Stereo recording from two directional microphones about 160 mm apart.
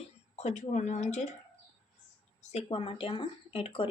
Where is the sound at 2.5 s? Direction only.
35° left (ahead or behind).